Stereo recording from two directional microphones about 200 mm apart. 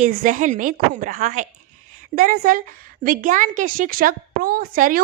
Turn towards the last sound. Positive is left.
turn(degrees=-45)  # may be behind; listen again after turning